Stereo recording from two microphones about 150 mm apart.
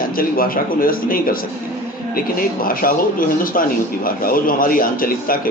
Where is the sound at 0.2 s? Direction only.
75° left (ahead or behind).